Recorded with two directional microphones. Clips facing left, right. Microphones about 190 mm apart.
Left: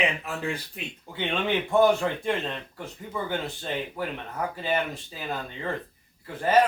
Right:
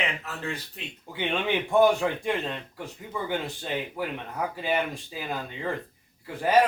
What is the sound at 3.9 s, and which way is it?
Speech, 10° right (ahead or behind).